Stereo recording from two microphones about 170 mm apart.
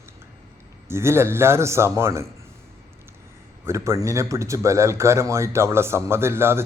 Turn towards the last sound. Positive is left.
turn(degrees=-15)  # may be behind; listen again after turning